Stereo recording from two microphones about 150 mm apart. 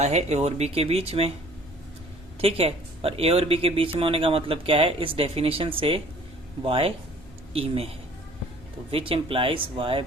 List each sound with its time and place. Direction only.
0.0 s speech: 45° right (ahead or behind)
2.4 s speech: 40° right (ahead or behind)
8.9 s speech: 40° right (ahead or behind)